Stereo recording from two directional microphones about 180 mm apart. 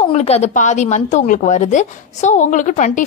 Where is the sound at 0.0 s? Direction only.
35° left (ahead or behind).